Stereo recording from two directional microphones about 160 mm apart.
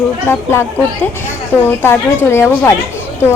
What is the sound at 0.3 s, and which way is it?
A woman's voice, 15° left (ahead or behind).